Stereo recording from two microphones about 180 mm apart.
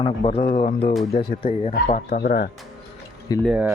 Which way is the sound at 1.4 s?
30° left (ahead or behind).